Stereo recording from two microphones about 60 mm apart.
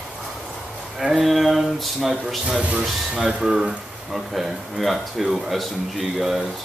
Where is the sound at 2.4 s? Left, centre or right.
Centre.